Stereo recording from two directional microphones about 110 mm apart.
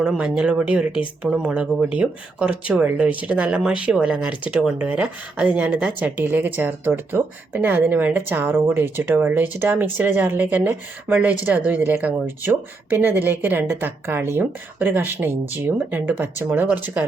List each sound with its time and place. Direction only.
0.0 s speech: 5° right (ahead or behind)